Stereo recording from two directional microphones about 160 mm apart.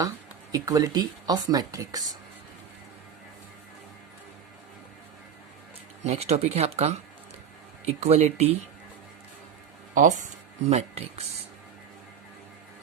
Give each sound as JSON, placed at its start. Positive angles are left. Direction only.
{"t": 0.5, "sound": "speech", "side_deg": -20}
{"t": 6.0, "sound": "speech", "side_deg": -45}
{"t": 9.9, "sound": "speech", "side_deg": -50}